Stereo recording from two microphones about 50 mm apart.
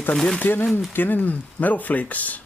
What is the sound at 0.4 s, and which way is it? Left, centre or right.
Speech, left.